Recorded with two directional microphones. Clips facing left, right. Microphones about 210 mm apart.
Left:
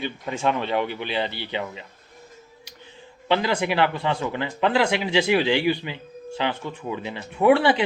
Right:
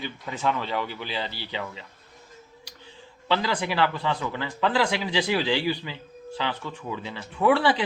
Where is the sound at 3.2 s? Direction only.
20° left (ahead or behind).